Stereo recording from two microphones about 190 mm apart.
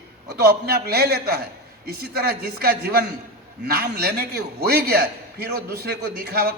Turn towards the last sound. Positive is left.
turn(degrees=-55)  # may be behind; listen again after turning